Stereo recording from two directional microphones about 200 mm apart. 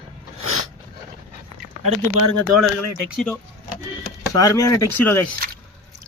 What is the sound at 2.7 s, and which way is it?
Speech, centre (ahead or behind).